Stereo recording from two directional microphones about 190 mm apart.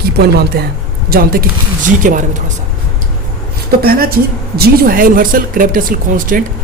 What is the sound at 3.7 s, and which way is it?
Speech, 50° right (ahead or behind).